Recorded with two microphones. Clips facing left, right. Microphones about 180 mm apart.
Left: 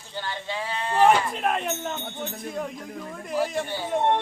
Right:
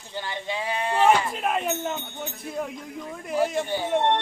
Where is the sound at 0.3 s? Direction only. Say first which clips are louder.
Right 2 dB; 15° right (ahead or behind).